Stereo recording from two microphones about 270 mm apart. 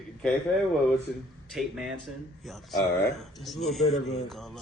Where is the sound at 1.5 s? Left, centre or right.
Centre.